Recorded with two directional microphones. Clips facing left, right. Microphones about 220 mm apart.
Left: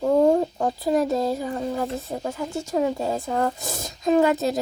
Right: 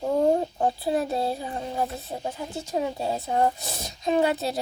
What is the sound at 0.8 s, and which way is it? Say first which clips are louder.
Speech: left 4 dB; 40° left (ahead or behind).